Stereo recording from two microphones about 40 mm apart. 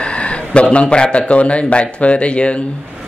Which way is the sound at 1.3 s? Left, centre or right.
Left.